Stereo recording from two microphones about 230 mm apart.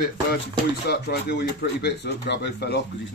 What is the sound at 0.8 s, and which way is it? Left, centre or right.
Speech, left.